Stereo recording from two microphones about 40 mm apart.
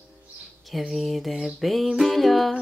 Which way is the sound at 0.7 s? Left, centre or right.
Centre.